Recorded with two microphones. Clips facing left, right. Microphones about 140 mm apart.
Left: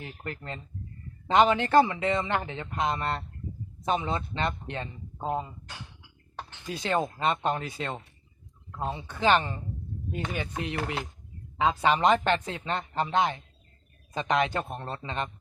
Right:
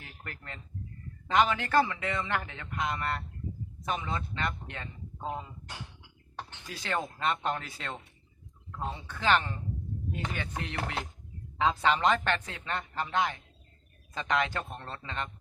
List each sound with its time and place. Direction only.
0.0 s speech: 25° left (ahead or behind)
6.7 s speech: 20° left (ahead or behind)
9.0 s speech: 20° left (ahead or behind)